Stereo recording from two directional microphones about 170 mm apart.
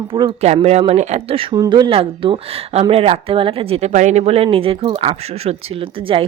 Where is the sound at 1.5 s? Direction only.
20° right (ahead or behind).